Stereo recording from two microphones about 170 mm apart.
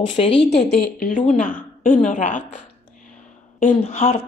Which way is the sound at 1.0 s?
50° left (ahead or behind).